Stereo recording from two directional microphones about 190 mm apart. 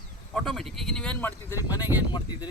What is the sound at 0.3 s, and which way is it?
Speech, centre (ahead or behind).